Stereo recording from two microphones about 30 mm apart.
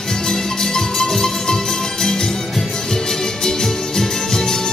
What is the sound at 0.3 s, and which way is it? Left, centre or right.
Music, centre.